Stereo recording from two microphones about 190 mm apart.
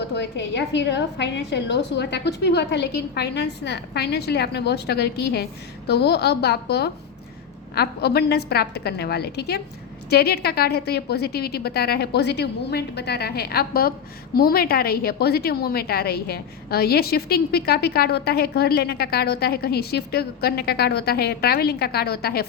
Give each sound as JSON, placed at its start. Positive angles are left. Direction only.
{"t": 0.1, "sound": "a woman's voice", "side_deg": 65}